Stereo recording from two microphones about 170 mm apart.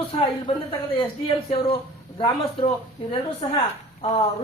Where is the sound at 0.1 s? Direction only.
30° left (ahead or behind).